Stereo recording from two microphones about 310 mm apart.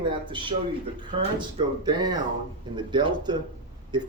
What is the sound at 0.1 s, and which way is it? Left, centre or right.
Speech, centre.